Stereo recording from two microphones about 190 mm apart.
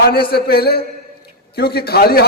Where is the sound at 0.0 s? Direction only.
55° left (ahead or behind).